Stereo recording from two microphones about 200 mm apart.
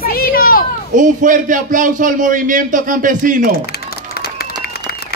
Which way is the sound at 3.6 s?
50° left (ahead or behind).